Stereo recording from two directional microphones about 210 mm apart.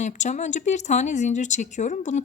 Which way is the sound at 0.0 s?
35° left (ahead or behind).